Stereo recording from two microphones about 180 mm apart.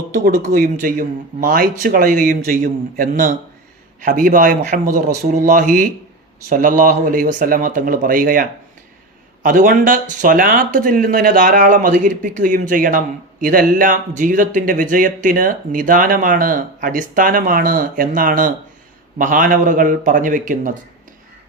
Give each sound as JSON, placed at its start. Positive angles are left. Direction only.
{"t": 0.1, "sound": "speech", "side_deg": -50}